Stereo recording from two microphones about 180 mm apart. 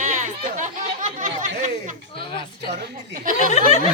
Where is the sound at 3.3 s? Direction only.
40° left (ahead or behind).